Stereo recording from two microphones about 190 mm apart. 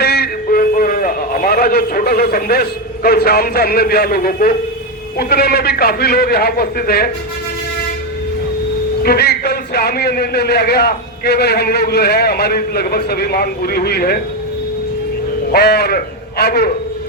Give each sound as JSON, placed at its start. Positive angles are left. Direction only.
{"t": 0.0, "sound": "music", "side_deg": 55}
{"t": 5.1, "sound": "a man's voice", "side_deg": 55}
{"t": 9.0, "sound": "a man's voice", "side_deg": 60}
{"t": 15.5, "sound": "a man's voice", "side_deg": 55}